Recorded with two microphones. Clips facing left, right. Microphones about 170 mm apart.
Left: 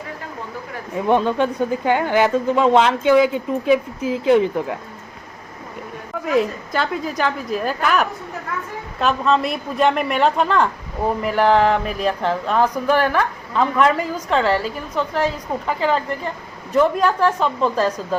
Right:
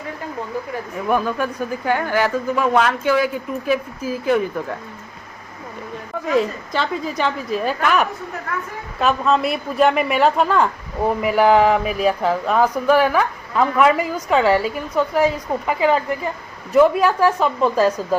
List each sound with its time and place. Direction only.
0.9 s speech: 25° left (ahead or behind)
6.2 s a woman's voice: 5° left (ahead or behind)